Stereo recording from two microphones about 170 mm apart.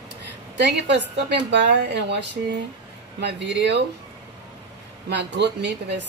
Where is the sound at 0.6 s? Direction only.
90° right.